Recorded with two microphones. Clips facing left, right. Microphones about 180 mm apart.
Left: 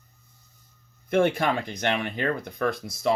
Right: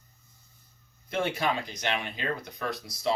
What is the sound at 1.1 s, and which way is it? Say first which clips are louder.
Speech: left 6 dB; 55° left (ahead or behind).